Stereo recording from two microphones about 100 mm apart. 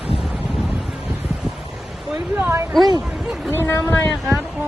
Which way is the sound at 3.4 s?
25° left (ahead or behind).